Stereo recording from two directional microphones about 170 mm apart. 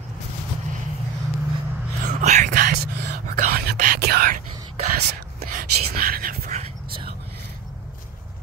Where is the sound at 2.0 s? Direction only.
45° right (ahead or behind); by 4.3 s 65° right (ahead or behind).